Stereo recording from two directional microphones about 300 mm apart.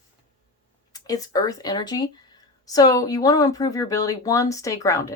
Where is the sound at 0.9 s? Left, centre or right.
Centre.